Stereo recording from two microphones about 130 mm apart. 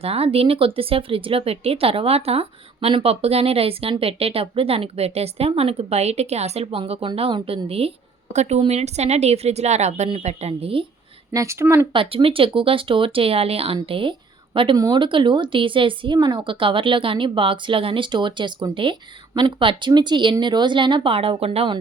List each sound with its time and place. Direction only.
0.0 s a woman's voice: 50° right (ahead or behind)
11.3 s a woman's voice: 20° right (ahead or behind)
11.9 s a woman's voice: 45° right (ahead or behind)